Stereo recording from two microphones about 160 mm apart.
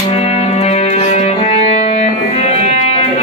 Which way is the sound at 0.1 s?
40° left (ahead or behind).